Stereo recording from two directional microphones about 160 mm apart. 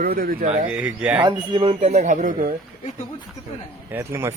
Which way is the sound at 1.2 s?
30° right (ahead or behind).